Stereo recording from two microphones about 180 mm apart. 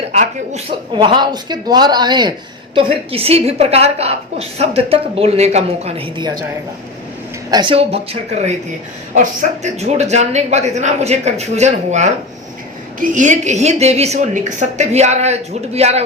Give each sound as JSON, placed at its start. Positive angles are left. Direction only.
{"t": 0.1, "sound": "a woman's voice", "side_deg": -40}
{"t": 0.9, "sound": "a woman's voice", "side_deg": -25}
{"t": 7.5, "sound": "a woman's voice", "side_deg": -25}